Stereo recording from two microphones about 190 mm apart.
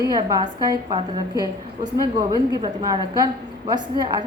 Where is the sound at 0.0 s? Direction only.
20° right (ahead or behind).